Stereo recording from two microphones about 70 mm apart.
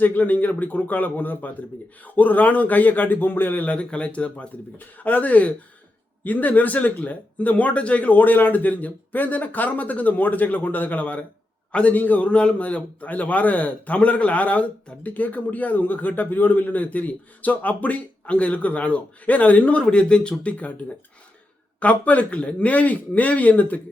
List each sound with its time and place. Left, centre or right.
0.0 s a man's voice: left